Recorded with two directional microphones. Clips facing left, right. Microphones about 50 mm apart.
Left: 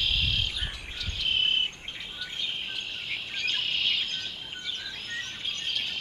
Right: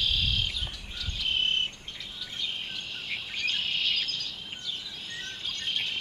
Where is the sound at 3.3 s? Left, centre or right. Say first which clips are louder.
Even; centre.